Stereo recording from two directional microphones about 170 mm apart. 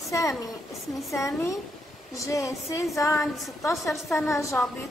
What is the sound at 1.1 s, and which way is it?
A woman's voice, 15° left (ahead or behind).